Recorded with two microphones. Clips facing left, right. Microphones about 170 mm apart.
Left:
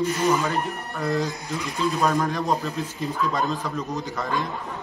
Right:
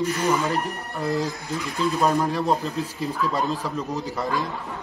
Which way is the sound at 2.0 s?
15° right (ahead or behind).